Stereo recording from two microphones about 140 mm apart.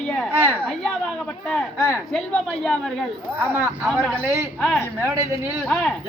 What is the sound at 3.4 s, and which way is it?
Speech, 15° right (ahead or behind).